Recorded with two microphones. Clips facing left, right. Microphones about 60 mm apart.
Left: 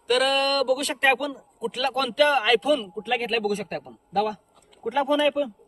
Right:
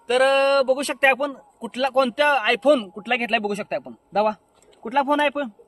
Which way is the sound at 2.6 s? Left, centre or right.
Right.